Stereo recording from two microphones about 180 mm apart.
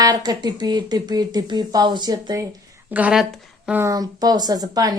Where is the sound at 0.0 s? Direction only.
20° right (ahead or behind); by 3.8 s centre (ahead or behind).